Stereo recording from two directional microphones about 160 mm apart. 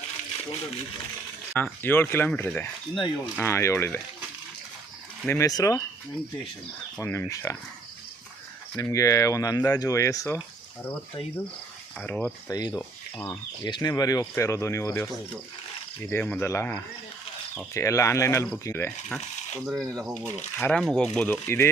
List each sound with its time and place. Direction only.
1.5 s speech: 10° left (ahead or behind)
3.5 s speech: 15° left (ahead or behind)
5.3 s speech: 20° left (ahead or behind)
7.0 s speech: 15° left (ahead or behind)
8.8 s speech: 20° left (ahead or behind)
11.9 s speech: 10° left (ahead or behind)
12.5 s speech: 25° left (ahead or behind)
13.1 s speech: 10° left (ahead or behind)
13.7 s speech: 25° left (ahead or behind)
18.9 s speech: 5° left (ahead or behind)